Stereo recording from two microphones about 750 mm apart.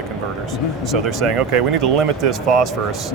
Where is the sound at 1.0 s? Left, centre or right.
Right.